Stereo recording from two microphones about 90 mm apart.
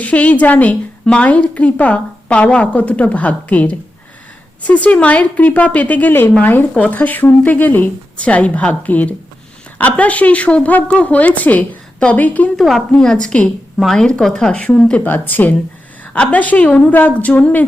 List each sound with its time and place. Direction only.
0.0 s a woman's voice: 15° left (ahead or behind)
12.5 s a woman's voice: centre (ahead or behind)
12.9 s a woman's voice: 10° left (ahead or behind)